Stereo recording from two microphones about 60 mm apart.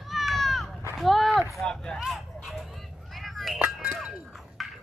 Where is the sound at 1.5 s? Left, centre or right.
Centre.